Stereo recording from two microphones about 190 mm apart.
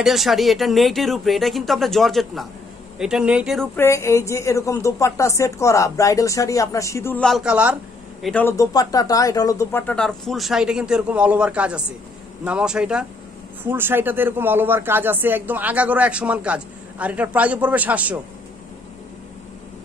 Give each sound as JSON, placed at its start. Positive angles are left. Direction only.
{"t": 0.0, "sound": "speech", "side_deg": 0}
{"t": 3.7, "sound": "a woman's voice", "side_deg": 15}
{"t": 8.2, "sound": "a man's voice", "side_deg": 5}